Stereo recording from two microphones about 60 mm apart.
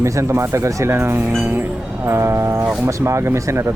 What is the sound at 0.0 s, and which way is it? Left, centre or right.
Speech, right.